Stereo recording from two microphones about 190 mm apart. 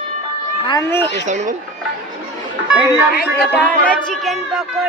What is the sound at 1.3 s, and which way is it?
Speech, 40° right (ahead or behind).